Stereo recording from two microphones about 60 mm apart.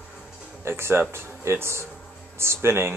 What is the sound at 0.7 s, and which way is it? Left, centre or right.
Speech, right.